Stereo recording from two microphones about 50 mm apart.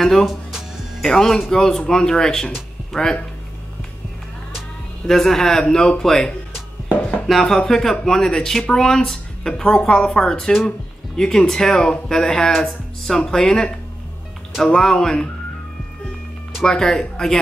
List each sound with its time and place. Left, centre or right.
0.0 s speech: centre
0.3 s music: centre
1.0 s speech: centre
5.0 s speech: centre
7.0 s a sound: left
7.2 s speech: centre
16.6 s speech: centre